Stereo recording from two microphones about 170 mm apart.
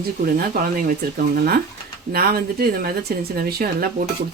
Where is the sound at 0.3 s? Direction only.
60° right (ahead or behind).